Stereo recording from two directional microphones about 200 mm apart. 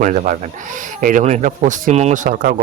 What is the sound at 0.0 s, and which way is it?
Speech, 40° right (ahead or behind).